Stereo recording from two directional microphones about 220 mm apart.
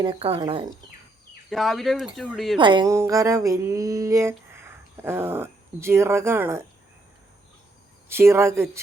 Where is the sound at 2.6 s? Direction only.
20° right (ahead or behind).